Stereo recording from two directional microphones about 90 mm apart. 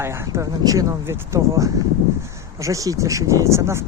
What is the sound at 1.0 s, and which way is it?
Speech, 35° right (ahead or behind).